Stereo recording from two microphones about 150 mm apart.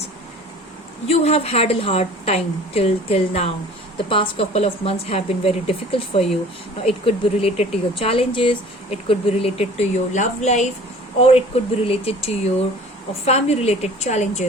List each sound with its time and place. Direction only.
1.0 s a woman's voice: 40° left (ahead or behind)